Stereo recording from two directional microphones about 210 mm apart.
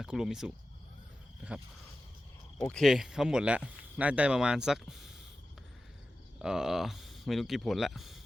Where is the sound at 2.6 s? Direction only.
5° left (ahead or behind).